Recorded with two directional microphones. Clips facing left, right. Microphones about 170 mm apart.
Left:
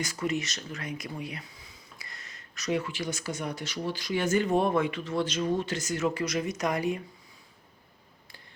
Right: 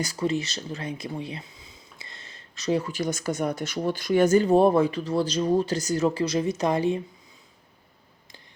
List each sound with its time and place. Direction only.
0.0 s speech: 35° right (ahead or behind)